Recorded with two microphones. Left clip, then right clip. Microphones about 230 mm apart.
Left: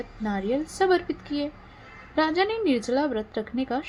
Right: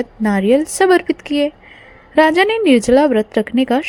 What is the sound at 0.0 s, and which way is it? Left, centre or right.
A woman's voice, right.